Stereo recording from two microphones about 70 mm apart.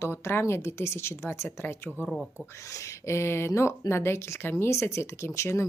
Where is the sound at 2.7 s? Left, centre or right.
Left.